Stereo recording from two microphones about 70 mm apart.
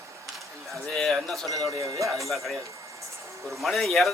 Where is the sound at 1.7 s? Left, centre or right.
Right.